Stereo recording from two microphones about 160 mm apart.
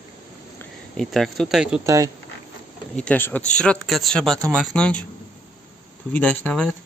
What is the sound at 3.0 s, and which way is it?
Speech, 10° left (ahead or behind).